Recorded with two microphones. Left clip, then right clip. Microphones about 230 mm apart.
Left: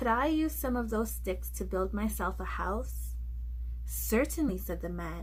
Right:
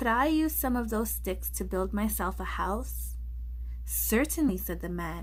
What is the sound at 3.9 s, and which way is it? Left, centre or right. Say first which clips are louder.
Speech: right 2 dB; right.